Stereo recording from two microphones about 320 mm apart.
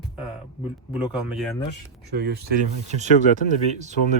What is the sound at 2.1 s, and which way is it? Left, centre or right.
Speech, right.